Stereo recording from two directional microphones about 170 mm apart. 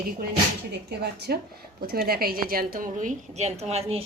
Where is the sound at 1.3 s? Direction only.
70° right (ahead or behind).